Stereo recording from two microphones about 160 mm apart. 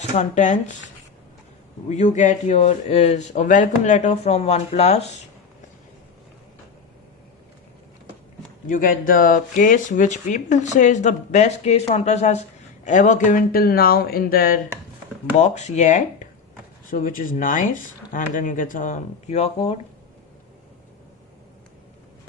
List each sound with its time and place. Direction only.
0.1 s speech: 50° left (ahead or behind)
1.9 s speech: 50° left (ahead or behind)
8.6 s speech: 60° left (ahead or behind)
15.4 s speech: 45° left (ahead or behind)
16.9 s speech: 60° left (ahead or behind); by 19.8 s 35° left (ahead or behind)